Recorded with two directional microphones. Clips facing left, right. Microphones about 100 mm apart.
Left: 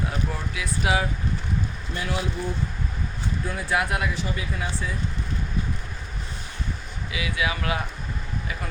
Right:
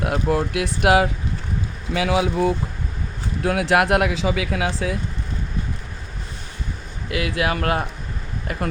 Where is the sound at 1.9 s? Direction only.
90° right.